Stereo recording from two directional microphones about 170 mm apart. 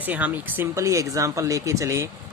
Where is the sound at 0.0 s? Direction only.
10° right (ahead or behind).